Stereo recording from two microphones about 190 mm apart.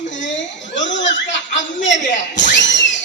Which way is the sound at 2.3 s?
70° left (ahead or behind).